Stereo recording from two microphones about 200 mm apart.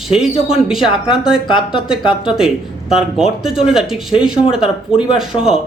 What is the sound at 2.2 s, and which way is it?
Speech, centre (ahead or behind).